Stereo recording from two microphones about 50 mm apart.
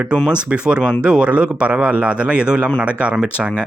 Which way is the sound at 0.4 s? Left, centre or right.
Right.